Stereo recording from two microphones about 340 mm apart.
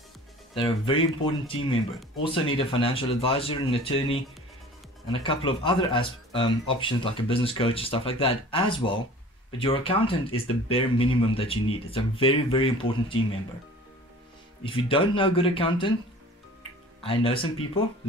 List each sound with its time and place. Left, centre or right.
0.6 s speech: centre
5.2 s speech: centre
14.6 s speech: centre
17.0 s speech: centre